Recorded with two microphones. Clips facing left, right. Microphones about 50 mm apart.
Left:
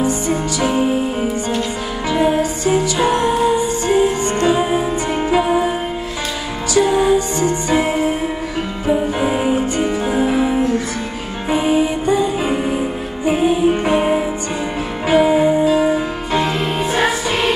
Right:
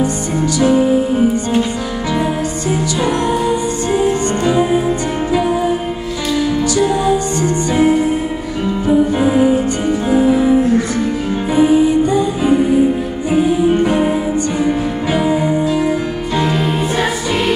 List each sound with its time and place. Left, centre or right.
0.6 s music: left
3.0 s music: left
7.4 s music: left
15.3 s music: centre